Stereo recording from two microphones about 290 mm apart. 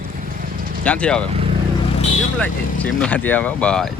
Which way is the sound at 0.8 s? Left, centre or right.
Centre.